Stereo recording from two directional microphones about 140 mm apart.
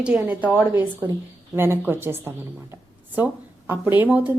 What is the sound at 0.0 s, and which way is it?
A woman's voice, 10° right (ahead or behind).